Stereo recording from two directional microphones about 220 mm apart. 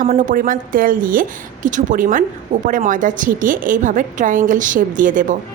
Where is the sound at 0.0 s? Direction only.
35° right (ahead or behind).